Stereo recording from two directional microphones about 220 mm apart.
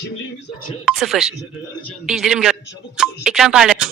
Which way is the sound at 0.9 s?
Centre (ahead or behind).